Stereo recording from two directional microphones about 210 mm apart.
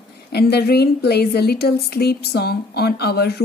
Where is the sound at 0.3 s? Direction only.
50° left (ahead or behind).